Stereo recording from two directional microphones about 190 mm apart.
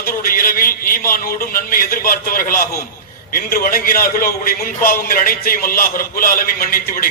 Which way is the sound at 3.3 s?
50° left (ahead or behind).